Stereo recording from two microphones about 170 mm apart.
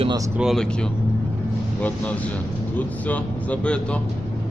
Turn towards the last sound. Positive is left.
turn(degrees=5)  # may be behind; listen again after turning